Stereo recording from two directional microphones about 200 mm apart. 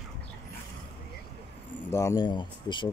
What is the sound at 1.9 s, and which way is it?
Speech, 15° left (ahead or behind).